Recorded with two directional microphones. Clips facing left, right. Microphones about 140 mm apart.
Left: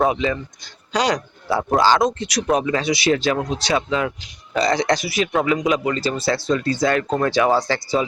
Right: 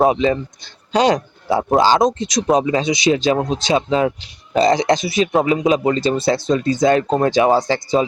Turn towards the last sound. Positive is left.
turn(degrees=-20)  # may be behind; listen again after turning